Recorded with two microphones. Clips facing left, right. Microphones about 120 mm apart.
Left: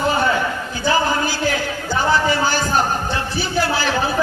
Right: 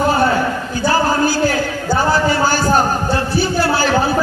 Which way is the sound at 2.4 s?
40° right (ahead or behind).